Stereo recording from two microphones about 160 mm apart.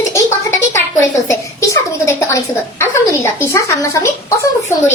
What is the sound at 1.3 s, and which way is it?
A woman's voice, 15° left (ahead or behind).